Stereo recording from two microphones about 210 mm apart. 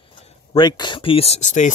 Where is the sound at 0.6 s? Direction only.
20° left (ahead or behind); by 1.7 s 35° left (ahead or behind).